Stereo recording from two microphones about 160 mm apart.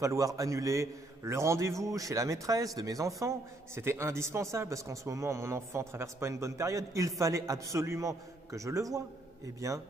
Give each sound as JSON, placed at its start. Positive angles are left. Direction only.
{"t": 0.0, "sound": "a man's voice", "side_deg": -20}